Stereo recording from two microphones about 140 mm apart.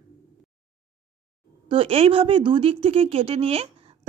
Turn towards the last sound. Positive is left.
turn(degrees=-45)  # may be behind; listen again after turning